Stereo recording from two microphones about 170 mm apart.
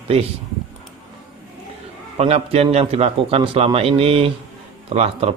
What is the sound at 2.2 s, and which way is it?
Speech, 35° right (ahead or behind).